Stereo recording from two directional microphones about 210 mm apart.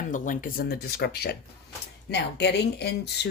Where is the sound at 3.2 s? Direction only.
50° left (ahead or behind).